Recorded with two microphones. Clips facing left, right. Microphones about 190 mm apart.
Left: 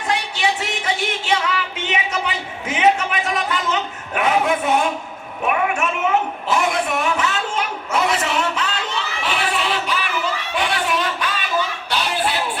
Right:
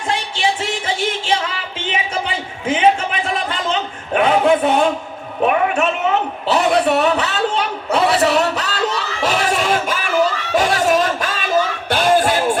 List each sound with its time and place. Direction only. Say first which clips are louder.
0.1 s music: right 1 dB; 30° right (ahead or behind)
5.5 s a sound: right 3 dB; 35° right (ahead or behind)
9.2 s music: right 6 dB; 40° right (ahead or behind)